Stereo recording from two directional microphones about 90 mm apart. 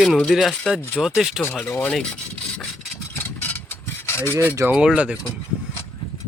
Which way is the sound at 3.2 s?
20° left (ahead or behind).